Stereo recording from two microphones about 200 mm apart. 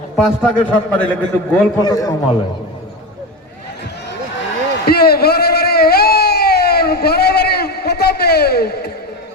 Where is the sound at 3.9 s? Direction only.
60° left (ahead or behind).